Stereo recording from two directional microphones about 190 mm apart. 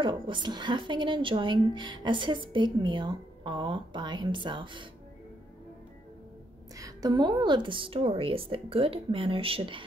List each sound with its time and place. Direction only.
0.0 s a woman's voice: 25° right (ahead or behind)
6.8 s a woman's voice: 20° right (ahead or behind)